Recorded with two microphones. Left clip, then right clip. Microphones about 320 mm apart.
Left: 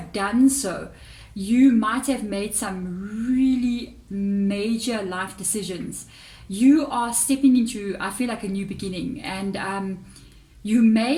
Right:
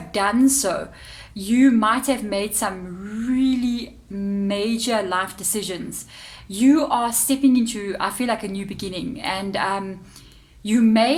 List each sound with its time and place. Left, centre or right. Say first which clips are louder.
0.1 s a woman's voice: right 2 dB; right